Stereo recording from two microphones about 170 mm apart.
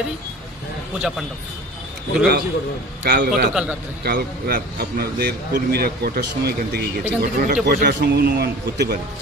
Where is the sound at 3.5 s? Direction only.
5° right (ahead or behind).